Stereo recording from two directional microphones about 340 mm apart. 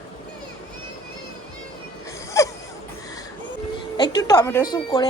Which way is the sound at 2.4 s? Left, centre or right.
Centre.